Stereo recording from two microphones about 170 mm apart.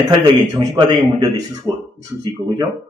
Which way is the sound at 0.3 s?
25° right (ahead or behind).